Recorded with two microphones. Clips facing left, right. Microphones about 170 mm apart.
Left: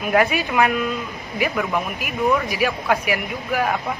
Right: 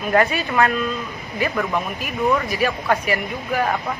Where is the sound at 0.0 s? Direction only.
10° left (ahead or behind).